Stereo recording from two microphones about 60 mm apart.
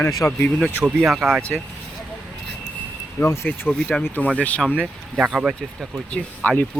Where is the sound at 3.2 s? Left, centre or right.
Left.